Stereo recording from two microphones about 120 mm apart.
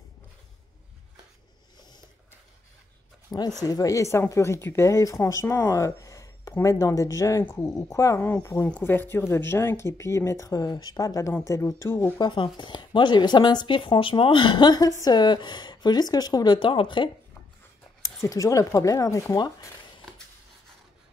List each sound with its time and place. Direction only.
3.3 s speech: 30° left (ahead or behind)
8.6 s speech: 15° left (ahead or behind)
12.2 s speech: 40° left (ahead or behind)
18.0 s speech: 30° left (ahead or behind)